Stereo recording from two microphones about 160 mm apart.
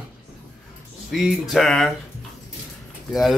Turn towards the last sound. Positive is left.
turn(degrees=0)  # may be behind; listen again after turning